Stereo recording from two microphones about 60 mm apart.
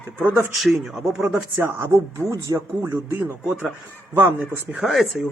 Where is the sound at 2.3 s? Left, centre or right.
Right.